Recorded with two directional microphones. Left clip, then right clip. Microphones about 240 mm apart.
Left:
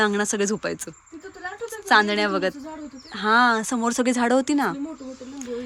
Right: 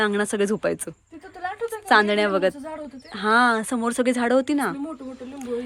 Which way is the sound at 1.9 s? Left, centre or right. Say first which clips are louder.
Right 1 dB; centre.